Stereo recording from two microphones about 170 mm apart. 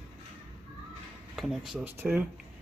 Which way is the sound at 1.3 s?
Centre (ahead or behind).